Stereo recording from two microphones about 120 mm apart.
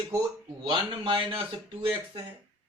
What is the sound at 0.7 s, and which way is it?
Speech, 45° right (ahead or behind).